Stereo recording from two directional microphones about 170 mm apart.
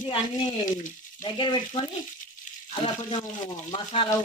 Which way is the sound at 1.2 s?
25° left (ahead or behind).